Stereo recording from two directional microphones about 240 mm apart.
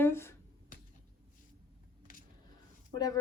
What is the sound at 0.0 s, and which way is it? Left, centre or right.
Finger snapping, centre.